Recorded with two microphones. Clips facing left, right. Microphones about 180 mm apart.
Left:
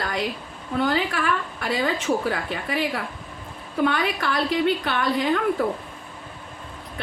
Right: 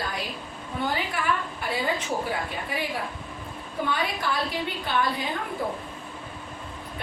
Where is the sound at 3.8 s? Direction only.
75° left (ahead or behind).